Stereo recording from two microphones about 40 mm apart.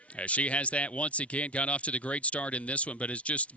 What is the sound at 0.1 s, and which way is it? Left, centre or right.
Speech, left.